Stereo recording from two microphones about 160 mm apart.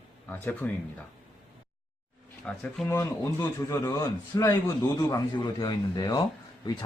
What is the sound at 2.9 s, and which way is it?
A man's voice, 15° left (ahead or behind).